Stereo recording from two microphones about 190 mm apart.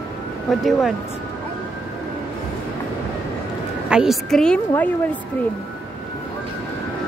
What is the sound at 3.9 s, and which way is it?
Speech, centre (ahead or behind).